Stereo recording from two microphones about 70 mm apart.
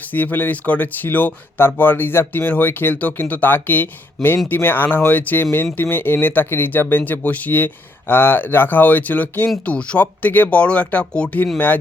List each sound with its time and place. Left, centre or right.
0.1 s speech: left